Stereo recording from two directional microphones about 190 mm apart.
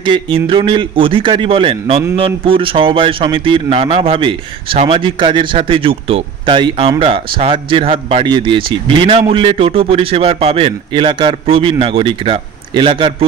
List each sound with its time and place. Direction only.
0.0 s speech: 25° right (ahead or behind)